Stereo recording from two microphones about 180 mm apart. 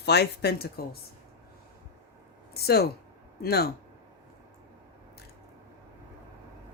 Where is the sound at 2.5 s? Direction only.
60° left (ahead or behind).